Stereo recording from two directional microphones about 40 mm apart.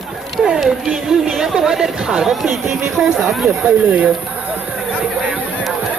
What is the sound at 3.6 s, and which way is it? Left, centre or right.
Speech, right.